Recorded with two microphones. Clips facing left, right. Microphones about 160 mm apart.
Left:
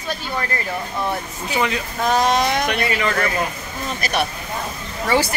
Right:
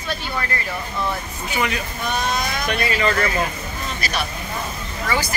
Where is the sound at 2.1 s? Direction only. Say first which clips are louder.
Left 7 dB; 90° left.